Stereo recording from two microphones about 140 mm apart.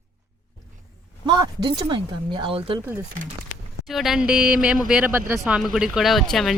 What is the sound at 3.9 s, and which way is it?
Speech, centre (ahead or behind).